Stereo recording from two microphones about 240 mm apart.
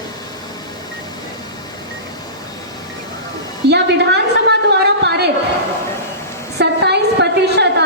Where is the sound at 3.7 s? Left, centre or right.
Right.